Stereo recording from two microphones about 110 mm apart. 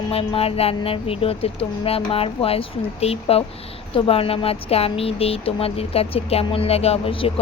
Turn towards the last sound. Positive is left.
turn(degrees=60)  # may be behind; listen again after turning